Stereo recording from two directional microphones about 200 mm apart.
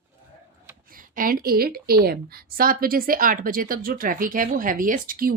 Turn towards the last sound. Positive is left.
turn(degrees=-45)  # may be behind; listen again after turning